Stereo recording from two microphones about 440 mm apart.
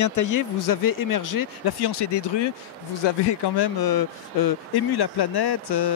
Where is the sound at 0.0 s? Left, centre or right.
Left.